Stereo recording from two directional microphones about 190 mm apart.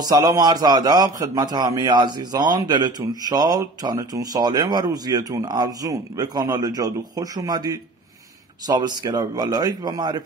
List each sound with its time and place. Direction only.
0.0 s a man's voice: 20° right (ahead or behind)